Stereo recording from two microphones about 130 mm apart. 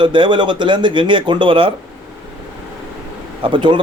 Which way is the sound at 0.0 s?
35° right (ahead or behind).